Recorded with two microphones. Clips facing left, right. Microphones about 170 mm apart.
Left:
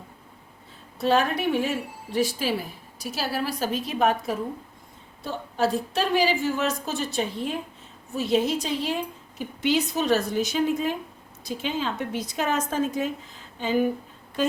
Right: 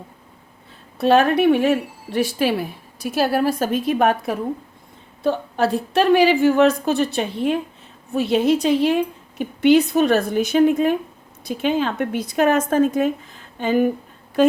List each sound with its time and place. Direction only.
0.9 s speech: 65° right (ahead or behind)